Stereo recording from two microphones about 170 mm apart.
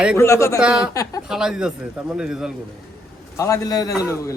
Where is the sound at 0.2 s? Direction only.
15° left (ahead or behind).